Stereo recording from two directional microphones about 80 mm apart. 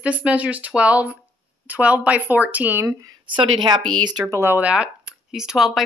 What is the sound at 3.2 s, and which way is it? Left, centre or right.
Speech, right.